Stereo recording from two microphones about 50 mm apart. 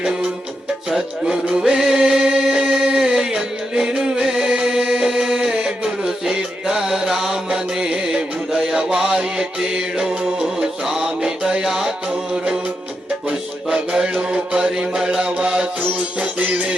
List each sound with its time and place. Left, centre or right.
0.9 s music: centre
13.7 s mantra: centre
14.7 s music: centre